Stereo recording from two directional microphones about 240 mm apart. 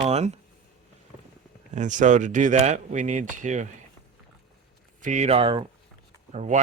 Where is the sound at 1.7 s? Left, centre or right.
Right.